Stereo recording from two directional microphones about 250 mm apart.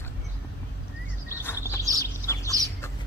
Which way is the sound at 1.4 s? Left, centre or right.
Centre.